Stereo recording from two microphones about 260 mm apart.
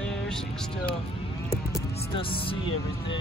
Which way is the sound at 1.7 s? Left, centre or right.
Centre.